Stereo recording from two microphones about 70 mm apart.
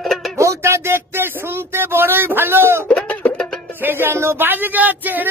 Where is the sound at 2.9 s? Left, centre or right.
Centre.